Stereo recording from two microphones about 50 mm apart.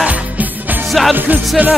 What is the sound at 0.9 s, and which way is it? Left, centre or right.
Music, centre.